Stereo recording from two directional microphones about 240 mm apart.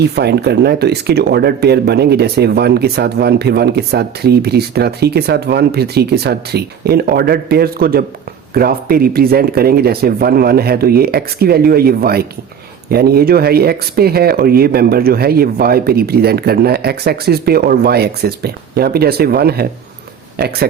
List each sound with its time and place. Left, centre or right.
0.2 s speech: right